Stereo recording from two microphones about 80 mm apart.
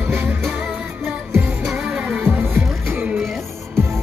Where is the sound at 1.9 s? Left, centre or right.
Centre.